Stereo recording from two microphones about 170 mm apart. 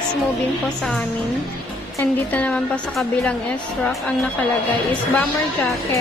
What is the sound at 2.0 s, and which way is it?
A woman's voice, 10° left (ahead or behind).